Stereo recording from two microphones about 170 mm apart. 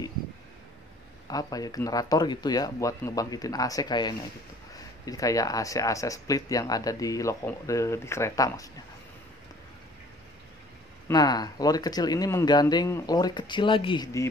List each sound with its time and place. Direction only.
1.2 s speech: 20° left (ahead or behind)
11.1 s speech: 25° left (ahead or behind)